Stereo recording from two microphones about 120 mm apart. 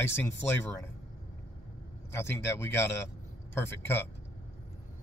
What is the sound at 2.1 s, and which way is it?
Speech, 20° left (ahead or behind).